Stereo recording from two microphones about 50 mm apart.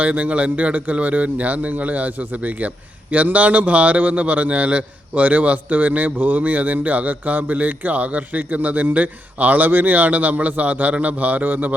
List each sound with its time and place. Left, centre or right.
0.0 s a man's voice: right